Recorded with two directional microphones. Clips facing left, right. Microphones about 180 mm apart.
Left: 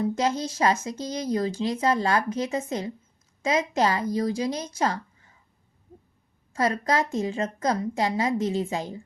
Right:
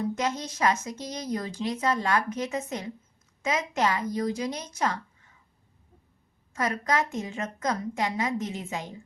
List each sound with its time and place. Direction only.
0.2 s a woman's voice: 30° left (ahead or behind)
6.5 s a woman's voice: 30° left (ahead or behind)